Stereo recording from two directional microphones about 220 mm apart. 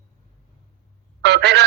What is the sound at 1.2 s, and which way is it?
Speech, 50° right (ahead or behind).